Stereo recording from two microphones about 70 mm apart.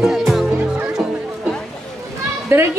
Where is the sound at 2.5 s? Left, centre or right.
Right.